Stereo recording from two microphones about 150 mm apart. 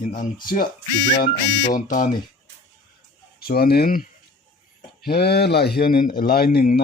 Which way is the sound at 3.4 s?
90° left.